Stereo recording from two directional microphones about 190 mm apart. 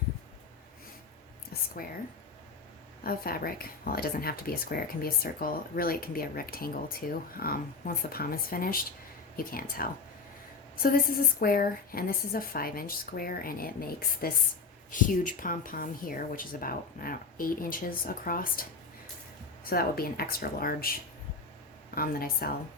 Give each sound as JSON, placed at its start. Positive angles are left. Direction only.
{"t": 1.8, "sound": "speech", "side_deg": 50}
{"t": 3.0, "sound": "speech", "side_deg": 50}
{"t": 19.7, "sound": "speech", "side_deg": 50}
{"t": 21.9, "sound": "speech", "side_deg": 50}